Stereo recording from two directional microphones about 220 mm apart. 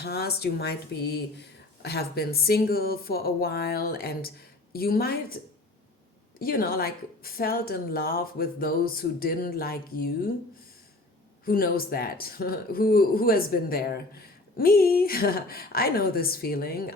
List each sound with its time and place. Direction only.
0.0 s speech: 45° left (ahead or behind)
6.4 s a woman's voice: 40° left (ahead or behind)
11.4 s speech: 40° left (ahead or behind)